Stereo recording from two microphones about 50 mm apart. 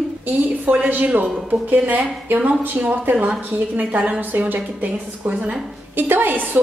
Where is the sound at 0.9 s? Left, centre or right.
Right.